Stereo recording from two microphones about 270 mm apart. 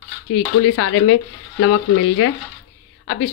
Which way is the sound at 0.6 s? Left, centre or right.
Left.